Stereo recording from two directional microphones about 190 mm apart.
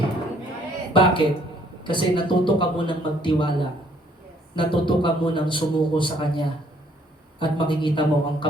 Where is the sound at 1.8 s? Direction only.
25° left (ahead or behind).